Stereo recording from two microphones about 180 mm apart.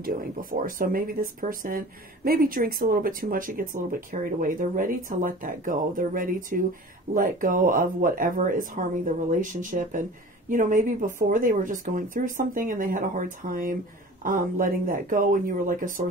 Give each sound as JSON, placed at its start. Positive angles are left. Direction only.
{"t": 0.0, "sound": "speech", "side_deg": -50}